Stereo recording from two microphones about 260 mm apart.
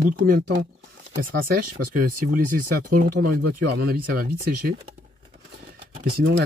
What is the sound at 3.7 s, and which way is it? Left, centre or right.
Speech, right.